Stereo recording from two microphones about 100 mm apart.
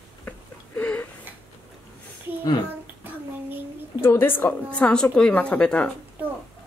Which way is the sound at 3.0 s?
20° right (ahead or behind).